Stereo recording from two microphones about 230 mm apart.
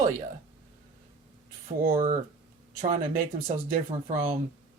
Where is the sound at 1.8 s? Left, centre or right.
Right.